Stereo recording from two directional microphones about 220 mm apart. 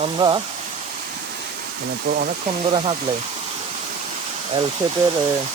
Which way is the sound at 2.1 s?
45° right (ahead or behind).